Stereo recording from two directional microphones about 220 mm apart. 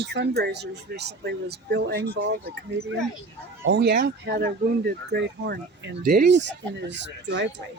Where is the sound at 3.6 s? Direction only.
55° right (ahead or behind).